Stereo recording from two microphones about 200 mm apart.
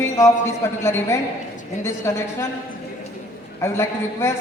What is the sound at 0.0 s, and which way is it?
A man's voice, 15° left (ahead or behind).